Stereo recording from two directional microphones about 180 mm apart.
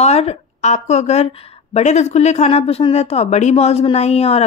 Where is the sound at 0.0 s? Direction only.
35° left (ahead or behind).